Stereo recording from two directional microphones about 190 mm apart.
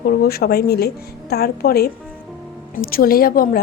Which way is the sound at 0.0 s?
55° left (ahead or behind).